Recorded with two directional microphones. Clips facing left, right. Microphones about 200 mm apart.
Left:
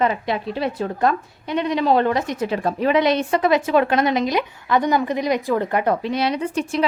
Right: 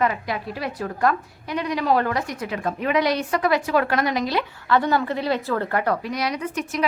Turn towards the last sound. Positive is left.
turn(degrees=30)  # may be behind; listen again after turning